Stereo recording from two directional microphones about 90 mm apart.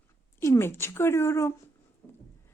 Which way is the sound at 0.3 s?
30° left (ahead or behind).